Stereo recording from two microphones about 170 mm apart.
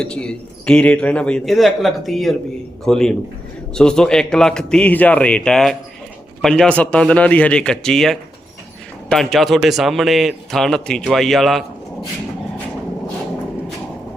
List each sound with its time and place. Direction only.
0.0 s a man's voice: 5° left (ahead or behind)